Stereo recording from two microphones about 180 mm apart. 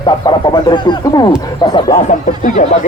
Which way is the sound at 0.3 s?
25° left (ahead or behind).